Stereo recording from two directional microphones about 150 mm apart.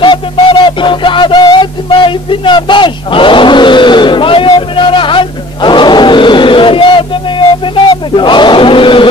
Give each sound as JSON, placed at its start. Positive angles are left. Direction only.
{"t": 0.0, "sound": "music", "side_deg": 30}
{"t": 8.2, "sound": "chant", "side_deg": 30}